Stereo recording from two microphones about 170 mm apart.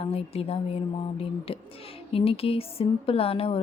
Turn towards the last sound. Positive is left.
turn(degrees=35)  # may be behind; listen again after turning